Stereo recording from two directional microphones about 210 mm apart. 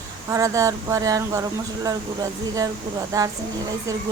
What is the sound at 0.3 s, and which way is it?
Speech, 15° right (ahead or behind).